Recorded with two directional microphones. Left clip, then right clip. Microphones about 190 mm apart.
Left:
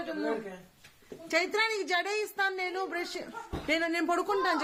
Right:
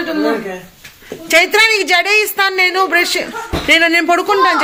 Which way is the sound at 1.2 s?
10° left (ahead or behind).